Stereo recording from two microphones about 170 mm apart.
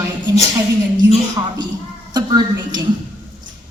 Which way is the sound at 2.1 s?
25° right (ahead or behind).